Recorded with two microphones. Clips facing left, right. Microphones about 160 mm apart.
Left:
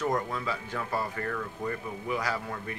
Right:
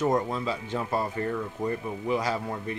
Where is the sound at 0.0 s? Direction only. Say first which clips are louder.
Right 4 dB; 25° right (ahead or behind).